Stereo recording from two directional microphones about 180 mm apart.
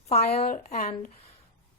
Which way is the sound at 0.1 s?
35° left (ahead or behind).